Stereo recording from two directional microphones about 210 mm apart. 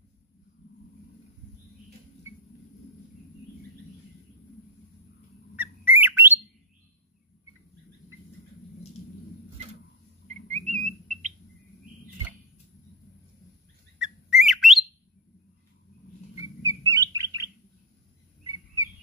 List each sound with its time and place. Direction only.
5.6 s bird: 10° right (ahead or behind)
10.2 s bird: 35° right (ahead or behind)
13.9 s bird: centre (ahead or behind)
16.6 s bird: 15° right (ahead or behind)